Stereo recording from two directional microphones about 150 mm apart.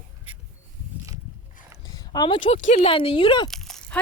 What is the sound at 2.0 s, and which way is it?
Speech, 30° left (ahead or behind).